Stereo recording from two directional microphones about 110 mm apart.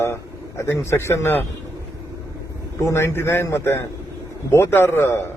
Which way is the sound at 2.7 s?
25° left (ahead or behind).